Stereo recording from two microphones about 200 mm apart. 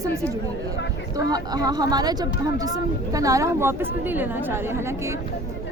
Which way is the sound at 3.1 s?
15° right (ahead or behind).